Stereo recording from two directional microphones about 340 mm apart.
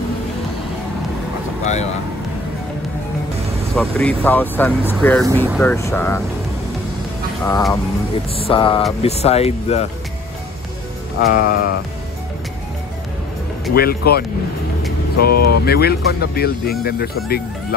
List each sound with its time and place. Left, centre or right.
1.6 s a sound: centre
3.7 s speech: centre
7.4 s speech: centre
11.1 s speech: left
13.7 s speech: left